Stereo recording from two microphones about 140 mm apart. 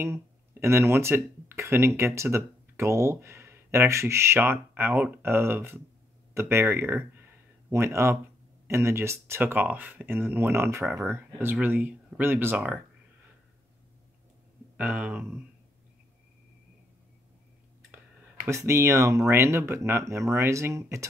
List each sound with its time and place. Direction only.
0.0 s speech: 20° right (ahead or behind)
14.8 s speech: 10° right (ahead or behind)
18.5 s speech: 20° right (ahead or behind)